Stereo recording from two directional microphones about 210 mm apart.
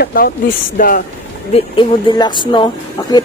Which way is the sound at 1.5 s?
25° left (ahead or behind).